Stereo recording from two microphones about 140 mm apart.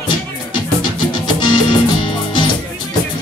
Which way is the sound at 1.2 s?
35° left (ahead or behind).